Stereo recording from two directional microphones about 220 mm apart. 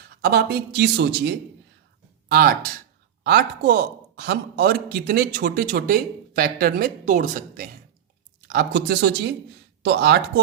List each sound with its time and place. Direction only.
0.2 s speech: 45° right (ahead or behind)